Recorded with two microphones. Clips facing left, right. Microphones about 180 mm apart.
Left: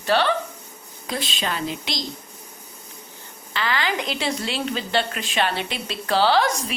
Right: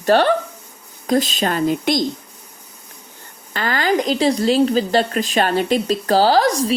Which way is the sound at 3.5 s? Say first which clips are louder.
Right 6 dB; 45° right (ahead or behind).